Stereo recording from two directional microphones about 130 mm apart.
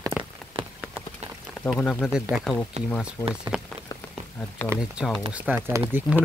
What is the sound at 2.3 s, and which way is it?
Speech, centre (ahead or behind).